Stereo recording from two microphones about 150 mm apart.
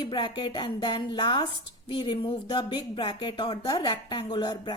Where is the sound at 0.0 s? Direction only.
30° left (ahead or behind).